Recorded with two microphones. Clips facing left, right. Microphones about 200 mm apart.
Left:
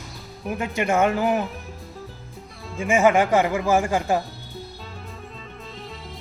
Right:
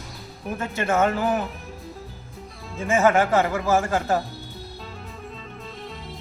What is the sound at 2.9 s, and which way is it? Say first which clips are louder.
Speech: left 1 dB; 15° left (ahead or behind).